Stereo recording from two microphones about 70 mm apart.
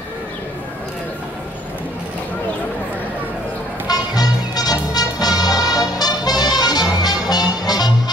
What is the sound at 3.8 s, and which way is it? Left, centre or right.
Music, left.